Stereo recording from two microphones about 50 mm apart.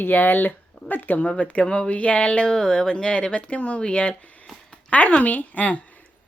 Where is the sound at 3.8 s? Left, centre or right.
Left.